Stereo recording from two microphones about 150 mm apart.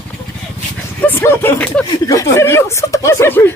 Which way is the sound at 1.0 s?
15° left (ahead or behind).